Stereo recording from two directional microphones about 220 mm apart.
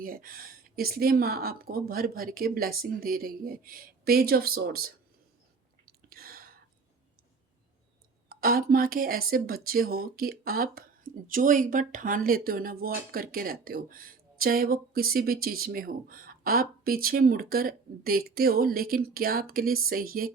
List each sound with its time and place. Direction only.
0.0 s speech: 40° right (ahead or behind)
5.8 s a sound: 40° right (ahead or behind)
8.3 s speech: 40° right (ahead or behind)